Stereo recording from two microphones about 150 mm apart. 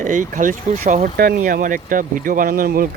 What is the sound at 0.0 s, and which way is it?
Speech, 60° right (ahead or behind).